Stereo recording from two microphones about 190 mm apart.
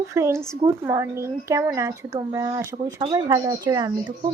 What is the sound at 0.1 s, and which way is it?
Speech, 15° right (ahead or behind).